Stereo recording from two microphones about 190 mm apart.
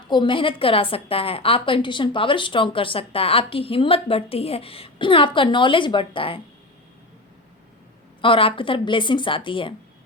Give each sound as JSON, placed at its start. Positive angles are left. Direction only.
{"t": 0.1, "sound": "a woman's voice", "side_deg": 25}
{"t": 8.2, "sound": "a woman's voice", "side_deg": 30}